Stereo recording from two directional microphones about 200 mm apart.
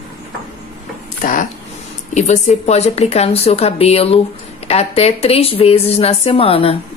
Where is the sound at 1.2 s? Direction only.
40° left (ahead or behind).